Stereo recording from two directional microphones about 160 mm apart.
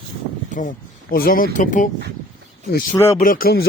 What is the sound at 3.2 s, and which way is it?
Speech, 60° left (ahead or behind).